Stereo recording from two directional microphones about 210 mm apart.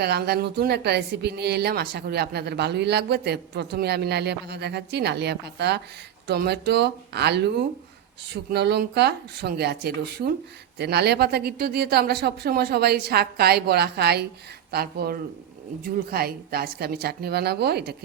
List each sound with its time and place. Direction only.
0.0 s speech: 50° right (ahead or behind)